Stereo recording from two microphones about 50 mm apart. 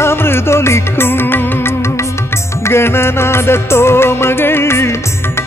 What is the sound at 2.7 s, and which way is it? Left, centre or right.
Music, left.